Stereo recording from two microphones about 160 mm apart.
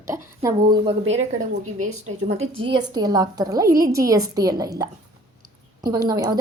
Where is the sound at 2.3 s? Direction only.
40° right (ahead or behind).